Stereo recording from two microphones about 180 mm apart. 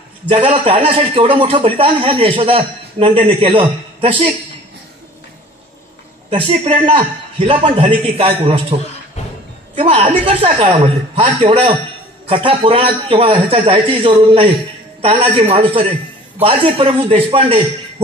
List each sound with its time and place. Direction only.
0.3 s a man's voice: 30° right (ahead or behind)
6.3 s a man's voice: 30° right (ahead or behind)
9.8 s a man's voice: 30° right (ahead or behind)